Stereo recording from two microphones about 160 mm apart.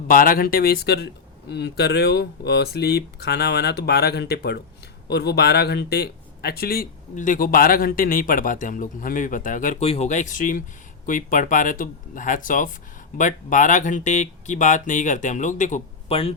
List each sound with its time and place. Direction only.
0.1 s speech: 65° left (ahead or behind)
9.8 s speech: 40° left (ahead or behind)
16.0 s speech: 35° left (ahead or behind)